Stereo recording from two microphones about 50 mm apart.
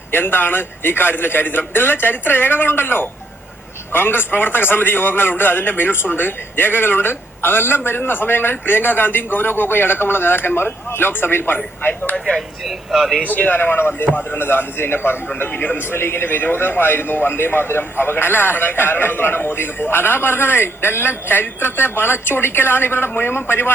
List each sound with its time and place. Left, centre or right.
0.1 s a man's voice: left
12.1 s speech: centre
12.6 s speech: centre
13.3 s a man's voice: left
15.4 s a man's voice: left
16.0 s a man's voice: left